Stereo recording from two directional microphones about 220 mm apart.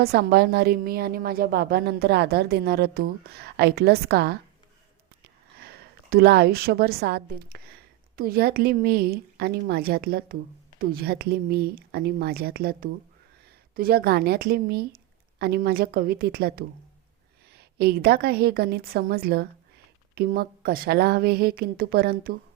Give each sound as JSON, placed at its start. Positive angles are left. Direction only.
{"t": 0.0, "sound": "a woman's voice", "side_deg": -45}
{"t": 5.5, "sound": "a woman's voice", "side_deg": -45}